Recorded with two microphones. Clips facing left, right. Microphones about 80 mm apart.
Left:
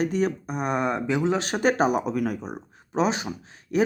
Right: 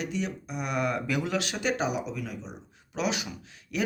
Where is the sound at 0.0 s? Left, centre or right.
Left.